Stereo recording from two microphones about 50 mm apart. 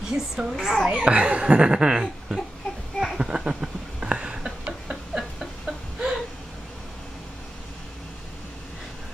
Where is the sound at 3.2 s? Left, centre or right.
Centre.